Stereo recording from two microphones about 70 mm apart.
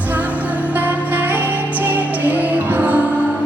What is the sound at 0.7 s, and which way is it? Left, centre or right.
Music, right.